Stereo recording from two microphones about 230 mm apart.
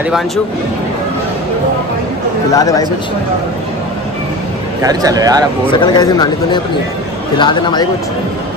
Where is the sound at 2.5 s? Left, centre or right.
Centre.